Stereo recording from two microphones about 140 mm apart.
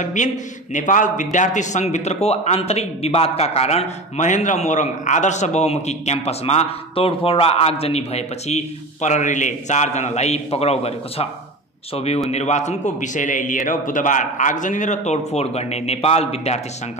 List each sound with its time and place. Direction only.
0.0 s a man's voice: 60° left (ahead or behind)